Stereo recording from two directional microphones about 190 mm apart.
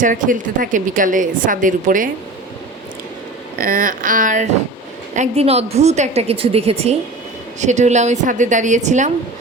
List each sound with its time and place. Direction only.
0.0 s a woman's voice: 45° right (ahead or behind)
3.6 s a woman's voice: 45° right (ahead or behind)